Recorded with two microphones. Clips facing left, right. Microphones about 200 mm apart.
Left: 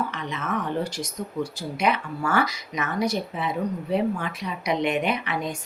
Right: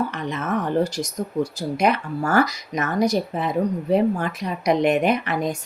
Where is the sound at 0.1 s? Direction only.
45° right (ahead or behind).